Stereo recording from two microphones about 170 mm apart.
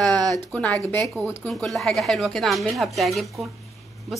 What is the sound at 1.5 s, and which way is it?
A woman's voice, centre (ahead or behind).